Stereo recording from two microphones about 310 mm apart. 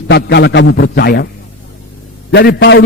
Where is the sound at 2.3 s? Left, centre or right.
Left.